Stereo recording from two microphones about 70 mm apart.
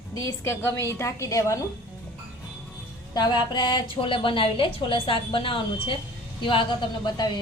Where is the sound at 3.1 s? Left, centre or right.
Left.